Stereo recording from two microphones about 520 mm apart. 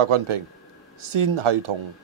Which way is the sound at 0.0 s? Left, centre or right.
Right.